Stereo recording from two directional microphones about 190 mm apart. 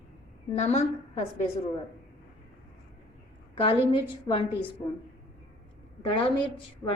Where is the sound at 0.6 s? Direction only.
35° left (ahead or behind).